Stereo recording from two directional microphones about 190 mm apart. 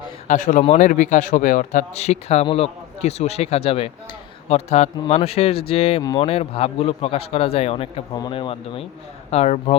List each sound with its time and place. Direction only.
0.3 s a man's voice: 45° left (ahead or behind)
6.0 s speech: 20° left (ahead or behind)
6.2 s speech: 30° left (ahead or behind)